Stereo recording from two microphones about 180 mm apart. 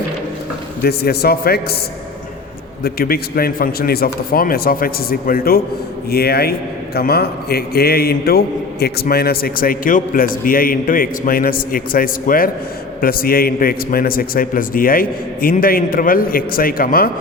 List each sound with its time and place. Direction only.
0.8 s speech: 60° left (ahead or behind)
2.8 s a man's voice: 55° left (ahead or behind)